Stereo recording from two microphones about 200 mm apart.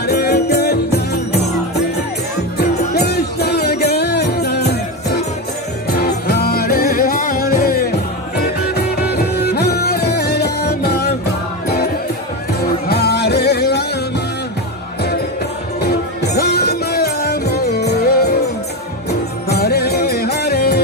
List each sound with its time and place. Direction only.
0.0 s music: 55° left (ahead or behind)
2.5 s music: 55° left (ahead or behind)
12.8 s music: 55° left (ahead or behind)
15.8 s music: 55° left (ahead or behind)